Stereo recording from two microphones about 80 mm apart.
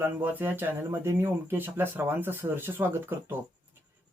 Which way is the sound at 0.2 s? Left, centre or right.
Right.